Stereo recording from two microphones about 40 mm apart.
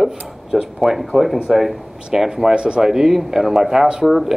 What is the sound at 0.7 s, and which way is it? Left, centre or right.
Speech, centre.